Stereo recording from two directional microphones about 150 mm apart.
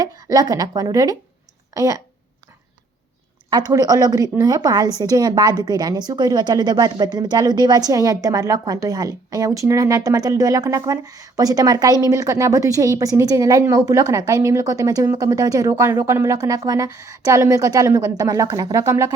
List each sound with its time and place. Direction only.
0.0 s a woman's voice: 25° right (ahead or behind)
3.7 s a woman's voice: 25° right (ahead or behind)